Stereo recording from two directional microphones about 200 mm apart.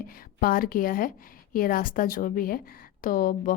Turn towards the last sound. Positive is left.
turn(degrees=45)  # may be behind; listen again after turning